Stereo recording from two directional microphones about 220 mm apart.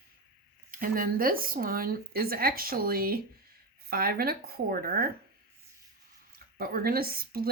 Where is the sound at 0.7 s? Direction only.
40° right (ahead or behind).